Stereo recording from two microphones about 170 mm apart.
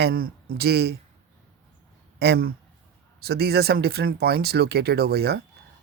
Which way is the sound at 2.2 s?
65° right (ahead or behind).